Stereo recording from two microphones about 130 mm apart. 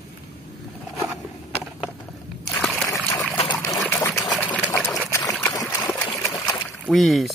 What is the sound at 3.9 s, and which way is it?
Trickle, 20° left (ahead or behind).